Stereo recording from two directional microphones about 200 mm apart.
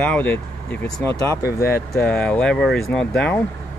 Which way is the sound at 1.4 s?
50° left (ahead or behind).